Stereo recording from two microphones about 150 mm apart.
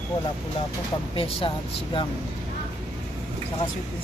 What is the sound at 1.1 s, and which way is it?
Speech, 40° left (ahead or behind).